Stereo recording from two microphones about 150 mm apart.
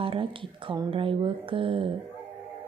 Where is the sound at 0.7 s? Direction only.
35° right (ahead or behind).